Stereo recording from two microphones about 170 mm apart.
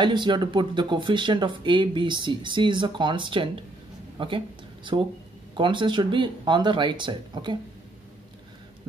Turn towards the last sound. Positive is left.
turn(degrees=-25)  # may be behind; listen again after turning